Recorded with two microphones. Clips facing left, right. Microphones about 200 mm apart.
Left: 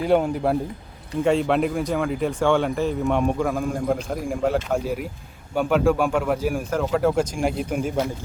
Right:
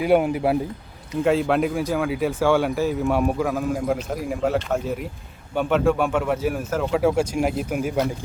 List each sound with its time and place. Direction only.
0.0 s speech: 10° right (ahead or behind)